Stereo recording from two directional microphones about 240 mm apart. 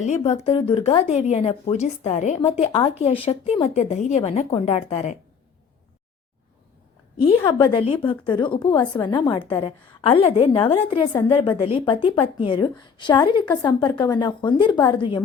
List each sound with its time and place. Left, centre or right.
0.0 s a woman's voice: left
7.6 s a woman's voice: left